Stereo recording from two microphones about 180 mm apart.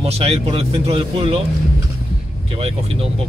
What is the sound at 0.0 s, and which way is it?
Speech, 35° right (ahead or behind).